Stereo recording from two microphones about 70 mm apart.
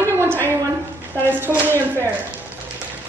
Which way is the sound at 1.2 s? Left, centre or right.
Right.